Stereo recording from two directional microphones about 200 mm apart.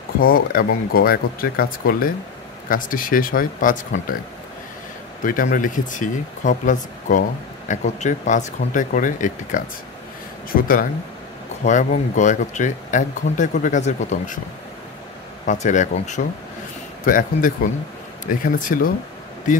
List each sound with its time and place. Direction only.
0.2 s speech: 45° left (ahead or behind)
5.2 s speech: 40° left (ahead or behind)
15.4 s speech: 35° left (ahead or behind)